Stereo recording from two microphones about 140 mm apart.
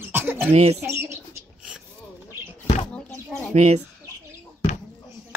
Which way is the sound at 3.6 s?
55° right (ahead or behind).